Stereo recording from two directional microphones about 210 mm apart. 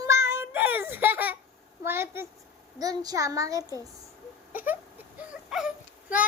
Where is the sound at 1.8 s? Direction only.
10° right (ahead or behind).